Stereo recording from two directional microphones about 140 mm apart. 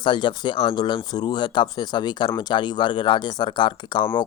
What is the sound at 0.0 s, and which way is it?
Speech, 35° left (ahead or behind).